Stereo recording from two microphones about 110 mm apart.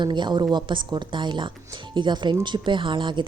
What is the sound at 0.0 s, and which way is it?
Speech, 45° right (ahead or behind).